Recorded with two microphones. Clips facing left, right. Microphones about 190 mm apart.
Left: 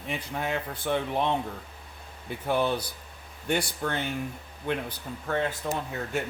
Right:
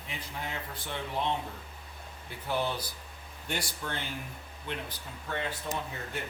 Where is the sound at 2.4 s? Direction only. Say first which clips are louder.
Left 6 dB; 60° left (ahead or behind).